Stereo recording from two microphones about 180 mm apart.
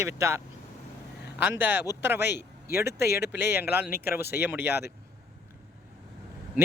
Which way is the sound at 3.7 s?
60° left (ahead or behind).